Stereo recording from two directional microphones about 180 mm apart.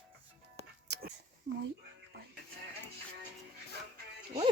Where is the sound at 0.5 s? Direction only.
65° right (ahead or behind).